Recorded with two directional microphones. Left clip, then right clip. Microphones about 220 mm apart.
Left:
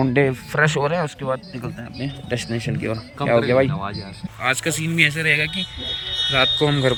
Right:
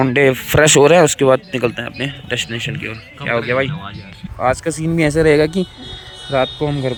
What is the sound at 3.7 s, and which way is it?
Speech, 25° left (ahead or behind).